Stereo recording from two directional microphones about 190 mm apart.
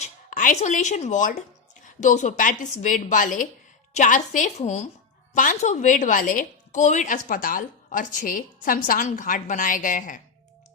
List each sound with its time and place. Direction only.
0.3 s a woman's voice: 45° left (ahead or behind)